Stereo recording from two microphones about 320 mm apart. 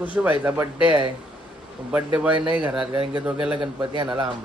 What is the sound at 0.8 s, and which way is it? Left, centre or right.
Speech, centre.